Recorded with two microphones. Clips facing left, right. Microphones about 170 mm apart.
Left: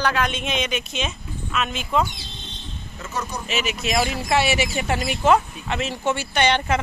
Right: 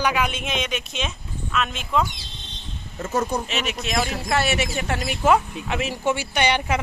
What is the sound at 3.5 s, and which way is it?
Speech, 5° left (ahead or behind).